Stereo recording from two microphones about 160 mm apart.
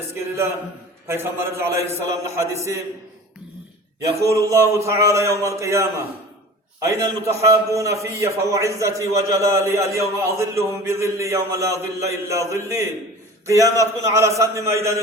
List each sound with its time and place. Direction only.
0.1 s a man's voice: 15° right (ahead or behind)
4.2 s a man's voice: 20° right (ahead or behind)